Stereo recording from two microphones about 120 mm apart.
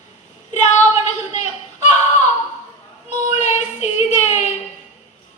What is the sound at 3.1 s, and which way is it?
Child singing, 80° left.